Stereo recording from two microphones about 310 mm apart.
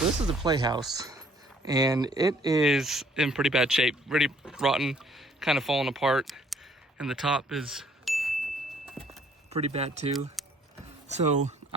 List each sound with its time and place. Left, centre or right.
0.4 s speech: centre
2.6 s speech: centre
9.5 s speech: centre